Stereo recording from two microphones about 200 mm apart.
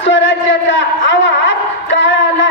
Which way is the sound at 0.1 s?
65° left (ahead or behind).